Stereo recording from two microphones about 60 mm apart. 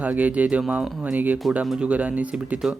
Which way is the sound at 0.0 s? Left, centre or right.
Right.